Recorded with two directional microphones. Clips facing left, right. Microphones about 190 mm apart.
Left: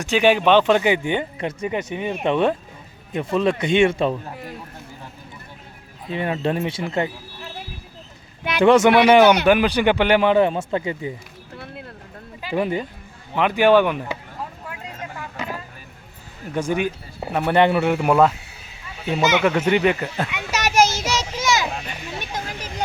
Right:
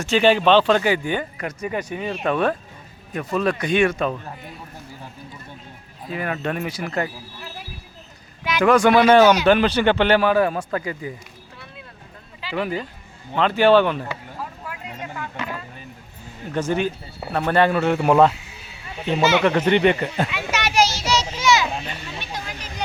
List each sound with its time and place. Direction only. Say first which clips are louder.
0.0 s speech: even; 15° left (ahead or behind)
6.1 s speech: left 3 dB; 25° left (ahead or behind)
8.6 s speech: left 1 dB; 25° left (ahead or behind)
11.5 s a sound: left 8 dB; 60° left (ahead or behind)
12.5 s speech: left 3 dB; 25° left (ahead or behind)
13.3 s speech: even; 15° left (ahead or behind)
16.6 s speech: even; 10° left (ahead or behind)
20.5 s children playing: left 4 dB; 40° left (ahead or behind)